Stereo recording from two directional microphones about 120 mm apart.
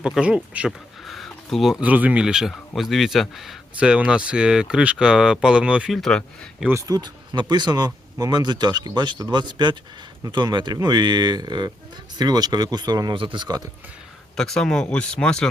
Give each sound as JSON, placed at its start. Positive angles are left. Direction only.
{"t": 0.0, "sound": "speech", "side_deg": -10}
{"t": 6.0, "sound": "speech", "side_deg": 10}
{"t": 6.7, "sound": "speech", "side_deg": -25}
{"t": 14.3, "sound": "speech", "side_deg": 5}